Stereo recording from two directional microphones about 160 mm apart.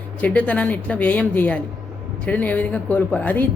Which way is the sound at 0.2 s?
10° left (ahead or behind).